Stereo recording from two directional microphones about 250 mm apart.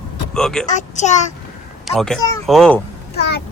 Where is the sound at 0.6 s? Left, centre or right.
Left.